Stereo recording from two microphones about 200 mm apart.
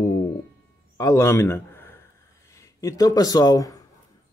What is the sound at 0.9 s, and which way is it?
A man's voice, 15° left (ahead or behind).